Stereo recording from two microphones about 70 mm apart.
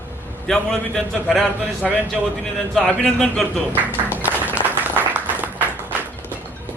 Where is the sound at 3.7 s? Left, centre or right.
Right.